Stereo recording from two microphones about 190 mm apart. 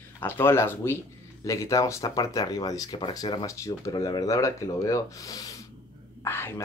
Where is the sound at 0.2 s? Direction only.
10° left (ahead or behind).